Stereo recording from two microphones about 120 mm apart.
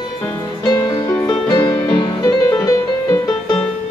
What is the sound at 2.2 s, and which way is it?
Music, 30° left (ahead or behind).